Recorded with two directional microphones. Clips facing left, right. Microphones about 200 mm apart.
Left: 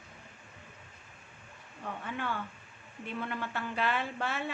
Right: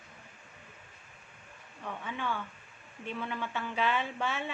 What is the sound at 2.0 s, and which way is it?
Speech, 10° left (ahead or behind).